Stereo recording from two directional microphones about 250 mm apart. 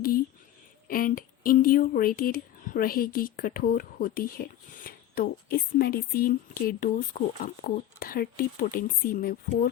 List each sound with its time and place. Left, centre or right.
0.9 s speech: left